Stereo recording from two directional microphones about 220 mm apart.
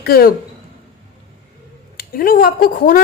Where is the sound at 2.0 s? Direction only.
40° left (ahead or behind).